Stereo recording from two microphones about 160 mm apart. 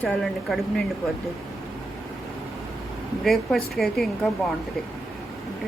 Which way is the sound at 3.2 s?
Centre (ahead or behind).